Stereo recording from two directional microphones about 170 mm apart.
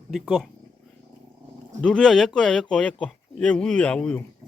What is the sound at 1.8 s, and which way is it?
Speech, 5° left (ahead or behind).